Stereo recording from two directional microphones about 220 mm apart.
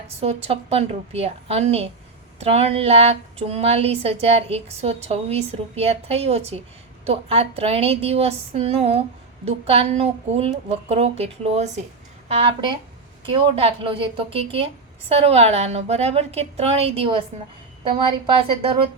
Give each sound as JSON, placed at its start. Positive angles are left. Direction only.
{"t": 0.2, "sound": "a woman's voice", "side_deg": -30}